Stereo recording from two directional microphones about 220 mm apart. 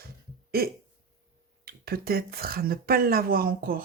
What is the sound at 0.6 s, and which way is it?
Speech, 45° right (ahead or behind).